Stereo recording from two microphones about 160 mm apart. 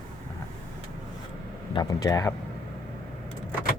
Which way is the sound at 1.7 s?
25° left (ahead or behind).